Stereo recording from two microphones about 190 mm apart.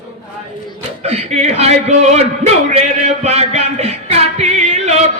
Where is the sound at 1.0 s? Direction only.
35° right (ahead or behind).